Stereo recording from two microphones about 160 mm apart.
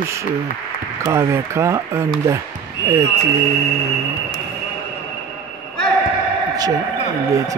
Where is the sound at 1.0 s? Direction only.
15° right (ahead or behind).